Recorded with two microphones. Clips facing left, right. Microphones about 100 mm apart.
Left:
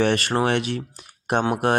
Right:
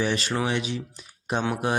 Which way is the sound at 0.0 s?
60° left (ahead or behind).